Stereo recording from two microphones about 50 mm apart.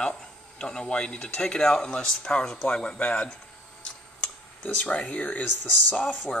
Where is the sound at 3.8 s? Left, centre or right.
Left.